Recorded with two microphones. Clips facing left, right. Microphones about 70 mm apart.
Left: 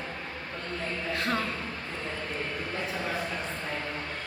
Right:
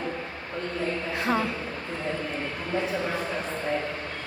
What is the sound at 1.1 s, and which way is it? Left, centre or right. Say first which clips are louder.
Music: right 4 dB; centre.